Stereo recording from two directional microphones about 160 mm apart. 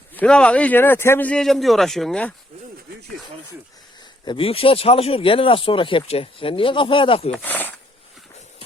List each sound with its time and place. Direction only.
0.1 s speech: 5° left (ahead or behind)
4.3 s speech: 35° left (ahead or behind)
7.3 s speech: 10° left (ahead or behind)